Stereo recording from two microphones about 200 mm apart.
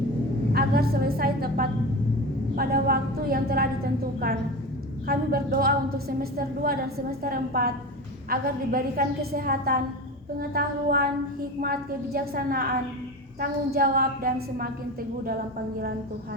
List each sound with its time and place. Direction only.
0.5 s a woman's voice: 50° right (ahead or behind)
5.0 s a woman's voice: 50° right (ahead or behind)